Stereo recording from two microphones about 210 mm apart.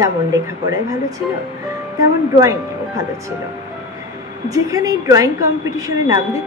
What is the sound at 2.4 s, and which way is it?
Speech, 15° right (ahead or behind).